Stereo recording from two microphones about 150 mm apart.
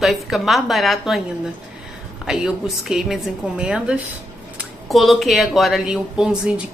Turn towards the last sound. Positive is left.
turn(degrees=-5)  # may be behind; listen again after turning